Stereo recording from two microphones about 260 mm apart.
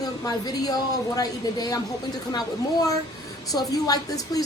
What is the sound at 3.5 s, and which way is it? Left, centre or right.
Speech, centre.